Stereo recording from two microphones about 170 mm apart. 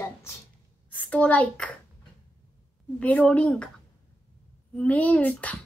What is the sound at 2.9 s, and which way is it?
Speech, 10° left (ahead or behind).